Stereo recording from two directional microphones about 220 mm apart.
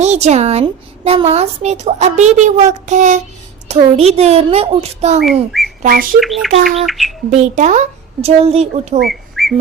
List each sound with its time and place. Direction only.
0.0 s a woman's voice: 30° right (ahead or behind)
5.5 s whistling: centre (ahead or behind)
5.8 s a woman's voice: 40° right (ahead or behind)
6.1 s speech: centre (ahead or behind)
7.3 s a woman's voice: 35° right (ahead or behind)
9.0 s whistling: centre (ahead or behind)